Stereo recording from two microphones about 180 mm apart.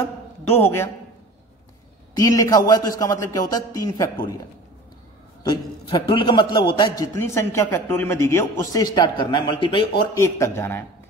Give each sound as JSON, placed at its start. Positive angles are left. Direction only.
{"t": 0.5, "sound": "a man's voice", "side_deg": 15}
{"t": 2.1, "sound": "a man's voice", "side_deg": 20}
{"t": 5.5, "sound": "a man's voice", "side_deg": 25}
{"t": 10.2, "sound": "a man's voice", "side_deg": 15}